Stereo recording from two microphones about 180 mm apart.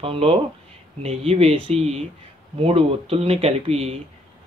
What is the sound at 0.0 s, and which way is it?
Speech, 35° right (ahead or behind).